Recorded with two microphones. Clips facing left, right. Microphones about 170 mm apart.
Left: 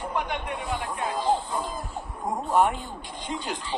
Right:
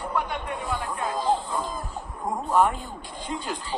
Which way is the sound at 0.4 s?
40° right (ahead or behind).